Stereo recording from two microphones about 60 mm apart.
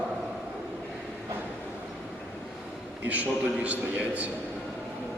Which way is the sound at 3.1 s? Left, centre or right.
Right.